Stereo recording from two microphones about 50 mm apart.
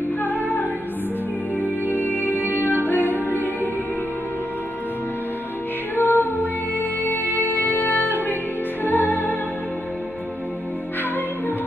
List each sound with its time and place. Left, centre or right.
0.2 s music: left
5.9 s music: left